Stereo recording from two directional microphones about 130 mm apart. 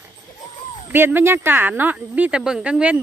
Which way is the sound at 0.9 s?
15° right (ahead or behind).